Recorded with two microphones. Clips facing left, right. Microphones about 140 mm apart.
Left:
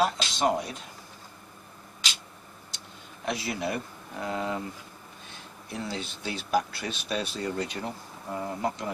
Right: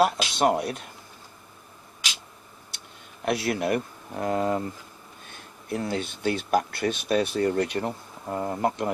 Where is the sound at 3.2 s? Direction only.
60° right (ahead or behind).